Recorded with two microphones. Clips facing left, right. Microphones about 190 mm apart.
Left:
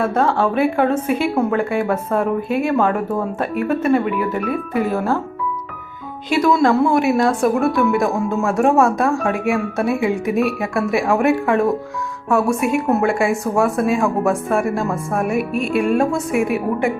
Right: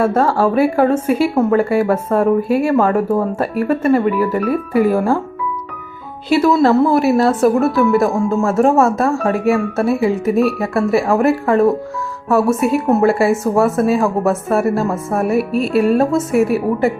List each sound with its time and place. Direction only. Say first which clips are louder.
0.0 s a woman's voice: right 3 dB; 5° right (ahead or behind)
6.4 s a woman's voice: right 2 dB; 5° right (ahead or behind)
12.5 s speech: right 3 dB; 35° right (ahead or behind)
12.9 s a woman's voice: right 6 dB; centre (ahead or behind)
15.2 s speech: right 5 dB; 35° right (ahead or behind)
15.9 s a woman's voice: right 3 dB; centre (ahead or behind)